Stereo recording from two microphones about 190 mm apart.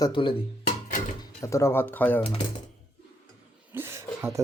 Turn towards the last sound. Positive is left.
turn(degrees=-15)  # may be behind; listen again after turning